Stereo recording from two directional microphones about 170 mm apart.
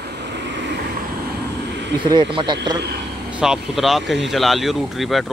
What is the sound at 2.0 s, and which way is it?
Speech, 30° right (ahead or behind).